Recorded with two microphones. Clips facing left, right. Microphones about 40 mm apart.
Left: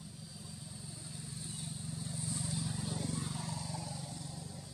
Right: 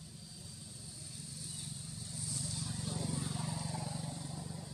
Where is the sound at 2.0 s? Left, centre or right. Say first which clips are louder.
Left 3 dB; left.